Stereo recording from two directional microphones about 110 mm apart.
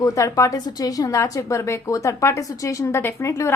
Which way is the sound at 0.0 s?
30° left (ahead or behind).